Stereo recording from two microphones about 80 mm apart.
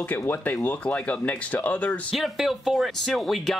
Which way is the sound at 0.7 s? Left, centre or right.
Centre.